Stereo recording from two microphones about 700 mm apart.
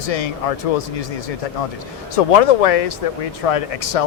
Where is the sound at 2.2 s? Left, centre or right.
Left.